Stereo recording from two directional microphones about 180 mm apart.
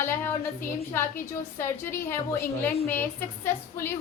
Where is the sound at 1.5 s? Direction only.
15° left (ahead or behind).